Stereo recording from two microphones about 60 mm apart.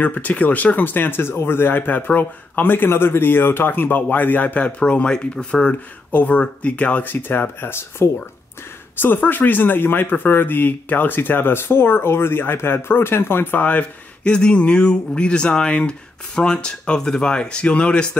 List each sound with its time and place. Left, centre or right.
0.0 s speech: left
7.1 s speech: left; by 18.1 s centre